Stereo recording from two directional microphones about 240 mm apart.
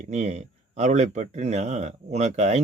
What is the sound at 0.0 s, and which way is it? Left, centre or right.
Speech, right.